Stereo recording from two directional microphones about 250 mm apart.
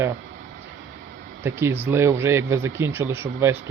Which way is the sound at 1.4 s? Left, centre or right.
Centre.